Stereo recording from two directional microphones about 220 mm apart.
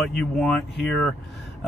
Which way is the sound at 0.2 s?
5° left (ahead or behind).